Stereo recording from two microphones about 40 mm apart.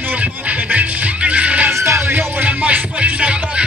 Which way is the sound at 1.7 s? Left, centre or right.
Right.